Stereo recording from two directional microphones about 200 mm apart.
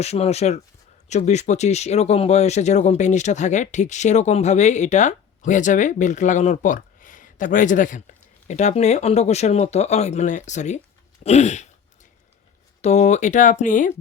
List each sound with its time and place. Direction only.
0.0 s speech: 30° left (ahead or behind)
11.2 s a sound: 35° left (ahead or behind)
12.8 s speech: 35° left (ahead or behind)